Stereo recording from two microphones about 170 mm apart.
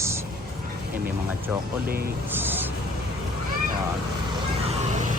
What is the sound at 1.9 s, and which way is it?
Speech, 60° right (ahead or behind).